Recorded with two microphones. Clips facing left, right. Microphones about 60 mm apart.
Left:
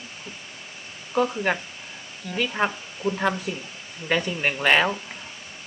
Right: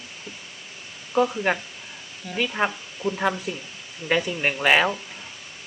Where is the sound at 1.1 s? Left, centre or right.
Centre.